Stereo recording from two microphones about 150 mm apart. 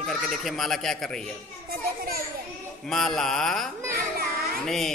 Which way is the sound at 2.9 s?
Centre (ahead or behind).